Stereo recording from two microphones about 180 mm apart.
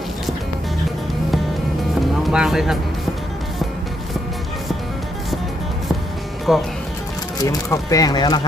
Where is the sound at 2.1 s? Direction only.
Centre (ahead or behind).